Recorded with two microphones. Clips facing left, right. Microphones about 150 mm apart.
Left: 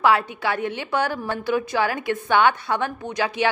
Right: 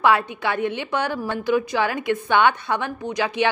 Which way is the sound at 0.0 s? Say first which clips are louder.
Even; 20° right (ahead or behind).